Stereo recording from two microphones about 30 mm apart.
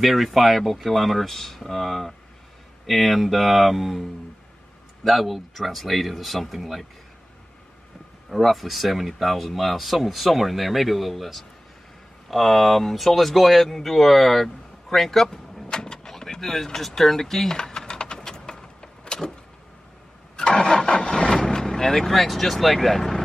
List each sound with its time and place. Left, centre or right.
0.0 s speech: centre
5.0 s speech: centre
8.3 s speech: centre
15.8 s vehicle: left
16.1 s speech: centre
17.5 s a sound: left
18.3 s vehicle: left
20.3 s engine starting: left
20.7 s vehicle: left
21.4 s speech: centre